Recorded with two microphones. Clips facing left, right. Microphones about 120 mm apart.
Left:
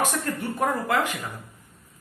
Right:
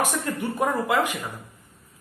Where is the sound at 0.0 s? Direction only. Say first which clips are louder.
Right 1 dB; 15° right (ahead or behind).